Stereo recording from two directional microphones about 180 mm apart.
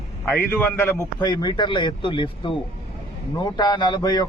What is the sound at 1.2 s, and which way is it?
A man's voice, 25° left (ahead or behind).